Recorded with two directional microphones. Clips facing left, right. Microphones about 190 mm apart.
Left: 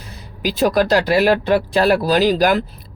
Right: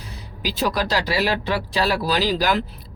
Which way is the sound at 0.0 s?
50° left (ahead or behind).